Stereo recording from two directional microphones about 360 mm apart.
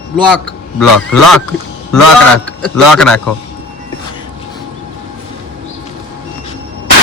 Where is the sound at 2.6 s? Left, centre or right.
Centre.